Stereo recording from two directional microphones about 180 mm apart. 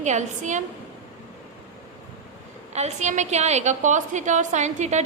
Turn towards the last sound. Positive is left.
turn(degrees=-40)  # may be behind; listen again after turning